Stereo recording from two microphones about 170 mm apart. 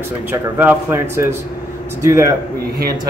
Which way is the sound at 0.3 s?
10° right (ahead or behind).